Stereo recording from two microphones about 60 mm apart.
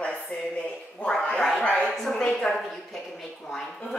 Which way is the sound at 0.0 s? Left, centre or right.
Left.